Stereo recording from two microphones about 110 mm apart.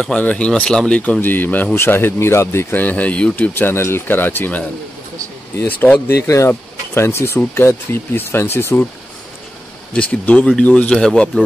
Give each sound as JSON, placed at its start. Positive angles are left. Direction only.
{"t": 0.0, "sound": "speech", "side_deg": 10}
{"t": 9.9, "sound": "speech", "side_deg": 10}